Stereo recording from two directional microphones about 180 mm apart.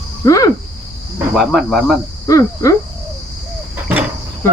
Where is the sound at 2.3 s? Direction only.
15° left (ahead or behind).